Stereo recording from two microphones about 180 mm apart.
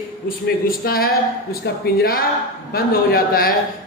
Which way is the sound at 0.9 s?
55° left (ahead or behind).